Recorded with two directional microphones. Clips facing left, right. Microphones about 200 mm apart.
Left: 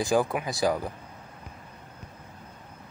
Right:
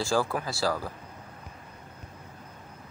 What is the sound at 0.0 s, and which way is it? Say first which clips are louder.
Speech: left 3 dB; 20° left (ahead or behind).